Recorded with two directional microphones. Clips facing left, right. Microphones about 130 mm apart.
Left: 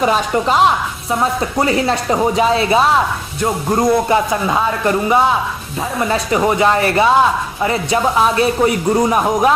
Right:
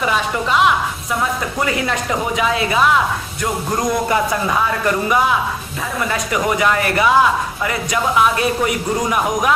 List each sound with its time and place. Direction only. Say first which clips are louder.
0.0 s speech: left 4 dB; 40° left (ahead or behind)